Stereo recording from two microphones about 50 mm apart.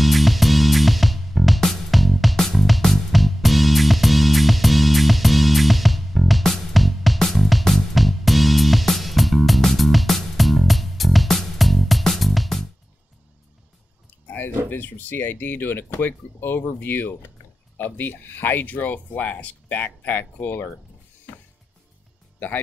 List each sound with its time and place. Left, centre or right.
0.0 s music: centre
14.2 s a sound: left
14.7 s speech: left
21.3 s music: left